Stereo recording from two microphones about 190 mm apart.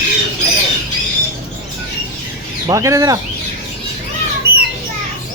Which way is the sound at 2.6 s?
15° right (ahead or behind).